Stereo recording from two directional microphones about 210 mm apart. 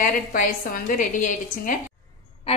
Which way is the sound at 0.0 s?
40° left (ahead or behind).